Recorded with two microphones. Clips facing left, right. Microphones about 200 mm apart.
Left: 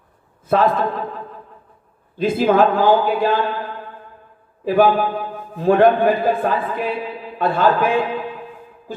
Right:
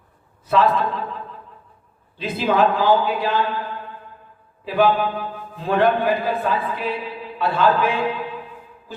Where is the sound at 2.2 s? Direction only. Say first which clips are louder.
Left 4 dB; 50° left (ahead or behind).